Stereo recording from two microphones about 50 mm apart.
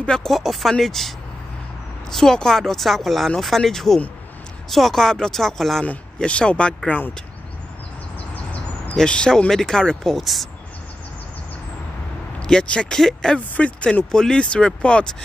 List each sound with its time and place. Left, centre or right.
0.0 s speech: centre
0.3 s speech: centre
6.1 s speech: left
6.9 s speech: left
8.9 s speech: centre
10.1 s speech: centre
12.4 s speech: centre
13.6 s speech: left
14.1 s speech: centre